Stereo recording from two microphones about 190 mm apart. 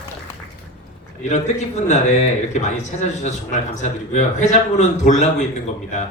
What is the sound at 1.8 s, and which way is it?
A man's voice, 35° left (ahead or behind).